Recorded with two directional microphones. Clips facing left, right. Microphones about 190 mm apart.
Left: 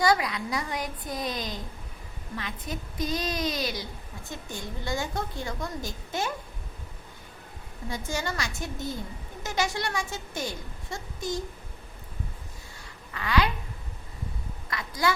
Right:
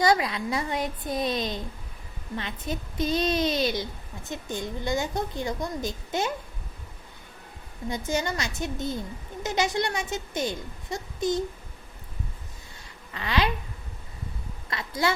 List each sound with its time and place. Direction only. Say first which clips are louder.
0.0 s a woman's voice: right 2 dB; 25° right (ahead or behind)
7.9 s speech: right 4 dB; 20° right (ahead or behind)
13.1 s speech: even; 25° right (ahead or behind)
14.7 s speech: right 1 dB; 25° right (ahead or behind)